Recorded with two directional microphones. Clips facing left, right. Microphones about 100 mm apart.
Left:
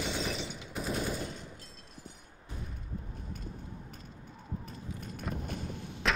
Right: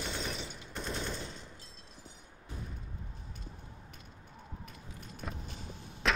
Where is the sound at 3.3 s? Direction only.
45° left (ahead or behind).